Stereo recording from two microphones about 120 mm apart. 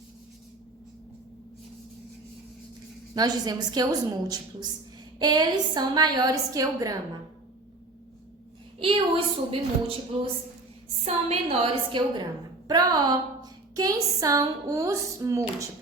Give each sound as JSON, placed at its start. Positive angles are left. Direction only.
{"t": 3.2, "sound": "a woman's voice", "side_deg": -35}
{"t": 8.8, "sound": "a woman's voice", "side_deg": -50}
{"t": 11.0, "sound": "a woman's voice", "side_deg": -55}
{"t": 12.6, "sound": "a woman's voice", "side_deg": -35}